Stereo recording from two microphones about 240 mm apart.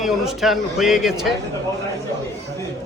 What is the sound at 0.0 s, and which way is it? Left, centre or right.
A man's voice, centre.